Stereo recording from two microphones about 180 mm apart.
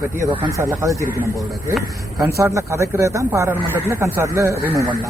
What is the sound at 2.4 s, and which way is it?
A man's voice, 15° right (ahead or behind).